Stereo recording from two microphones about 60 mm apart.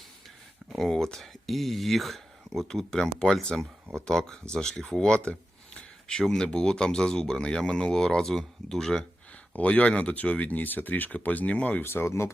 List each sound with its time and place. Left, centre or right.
0.8 s speech: centre
9.6 s speech: left
11.8 s speech: left